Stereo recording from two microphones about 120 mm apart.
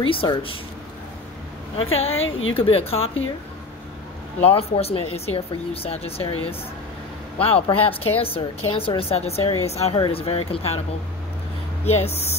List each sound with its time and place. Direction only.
0.0 s speech: 45° left (ahead or behind)
1.8 s speech: 55° left (ahead or behind)
4.4 s speech: 55° left (ahead or behind)
7.3 s speech: 50° left (ahead or behind)
11.8 s speech: 60° left (ahead or behind)